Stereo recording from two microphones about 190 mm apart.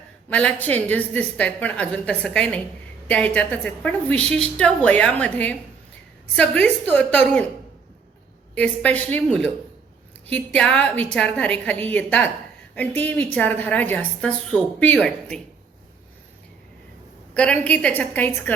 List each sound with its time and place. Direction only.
0.3 s a woman's voice: 10° left (ahead or behind)
8.5 s a woman's voice: 5° left (ahead or behind)
17.3 s a woman's voice: 5° left (ahead or behind)